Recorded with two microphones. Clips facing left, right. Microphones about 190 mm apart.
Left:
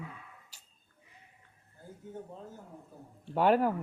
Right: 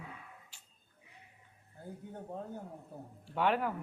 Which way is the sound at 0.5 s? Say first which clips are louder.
Even; 40° left (ahead or behind).